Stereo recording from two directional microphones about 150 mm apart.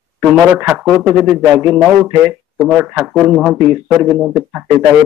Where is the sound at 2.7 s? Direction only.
5° right (ahead or behind).